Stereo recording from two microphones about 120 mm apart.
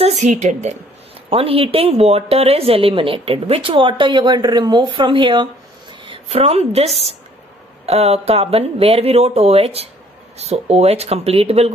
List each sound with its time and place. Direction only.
0.0 s speech: 80° right
1.3 s speech: 55° right (ahead or behind)
6.2 s speech: 60° right (ahead or behind)